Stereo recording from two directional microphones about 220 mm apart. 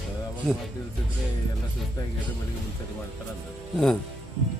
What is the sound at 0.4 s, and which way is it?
Speech, centre (ahead or behind).